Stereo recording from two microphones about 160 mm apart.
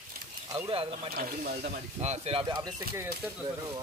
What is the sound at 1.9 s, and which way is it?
Speech, 45° right (ahead or behind).